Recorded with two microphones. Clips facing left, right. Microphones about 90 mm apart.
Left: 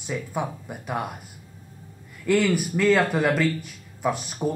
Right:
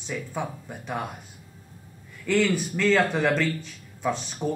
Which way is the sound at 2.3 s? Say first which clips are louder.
Left 2 dB; 10° left (ahead or behind).